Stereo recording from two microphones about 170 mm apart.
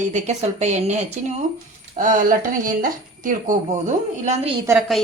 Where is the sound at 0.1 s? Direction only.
45° right (ahead or behind).